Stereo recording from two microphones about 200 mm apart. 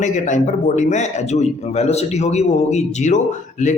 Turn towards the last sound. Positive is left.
turn(degrees=35)  # may be behind; listen again after turning